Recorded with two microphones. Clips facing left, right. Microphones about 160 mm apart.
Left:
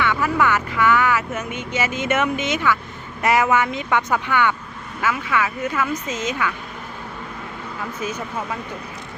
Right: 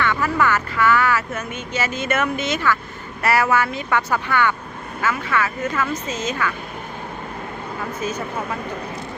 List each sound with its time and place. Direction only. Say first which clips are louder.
0.0 s speech: even; 10° left (ahead or behind)